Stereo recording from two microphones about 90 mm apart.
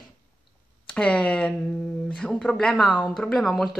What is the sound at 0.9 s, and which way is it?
Speech, 10° left (ahead or behind).